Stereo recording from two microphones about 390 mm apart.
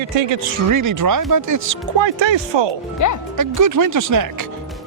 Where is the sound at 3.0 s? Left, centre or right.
Left.